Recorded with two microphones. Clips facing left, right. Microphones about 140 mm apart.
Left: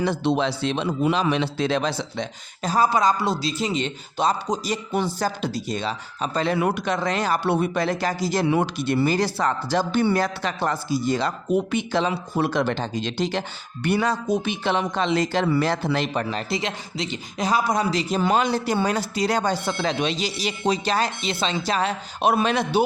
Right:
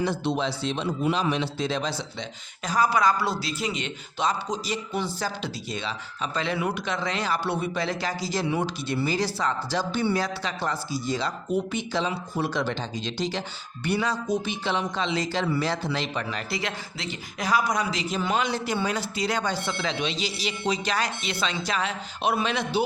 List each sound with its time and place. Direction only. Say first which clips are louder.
0.0 s a man's voice: left 4 dB; 70° left (ahead or behind)
2.6 s a man's voice: left 3 dB; 30° left (ahead or behind)
4.5 s speech: left 4 dB; 45° left (ahead or behind)
16.3 s a man's voice: left 4 dB; 20° left (ahead or behind); by 22.8 s 45° left (ahead or behind)